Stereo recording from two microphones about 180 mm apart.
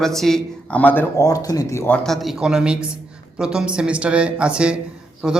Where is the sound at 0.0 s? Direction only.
Centre (ahead or behind).